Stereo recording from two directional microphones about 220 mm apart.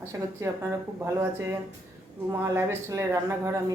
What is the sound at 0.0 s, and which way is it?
Speech, 15° right (ahead or behind).